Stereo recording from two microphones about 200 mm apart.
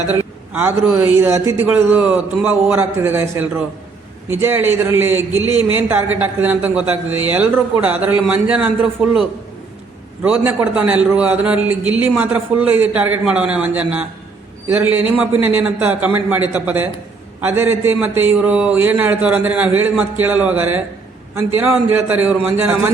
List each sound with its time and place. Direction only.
0.5 s a man's voice: 5° right (ahead or behind)
5.4 s speech: 20° left (ahead or behind)
5.7 s a man's voice: 10° right (ahead or behind)
10.2 s a man's voice: 10° right (ahead or behind)